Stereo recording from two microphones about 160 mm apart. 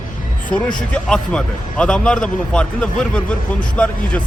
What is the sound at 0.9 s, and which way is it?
A man's voice, 5° left (ahead or behind).